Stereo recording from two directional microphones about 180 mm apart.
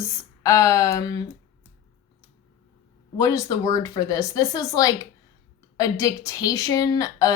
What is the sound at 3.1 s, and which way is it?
A woman's voice, 15° left (ahead or behind).